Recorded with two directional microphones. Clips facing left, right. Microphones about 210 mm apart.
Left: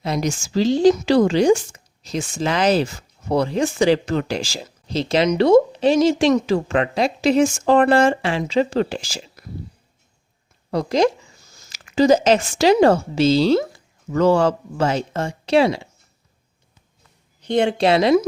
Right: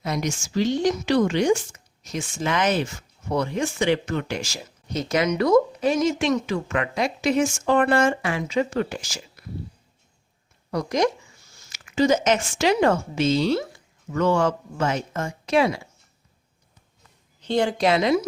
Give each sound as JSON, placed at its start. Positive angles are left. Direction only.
{"t": 0.0, "sound": "speech", "side_deg": 30}
{"t": 10.7, "sound": "a woman's voice", "side_deg": 30}
{"t": 17.4, "sound": "a woman's voice", "side_deg": 20}